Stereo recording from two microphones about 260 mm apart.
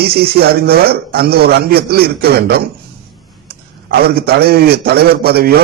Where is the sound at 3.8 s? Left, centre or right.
Right.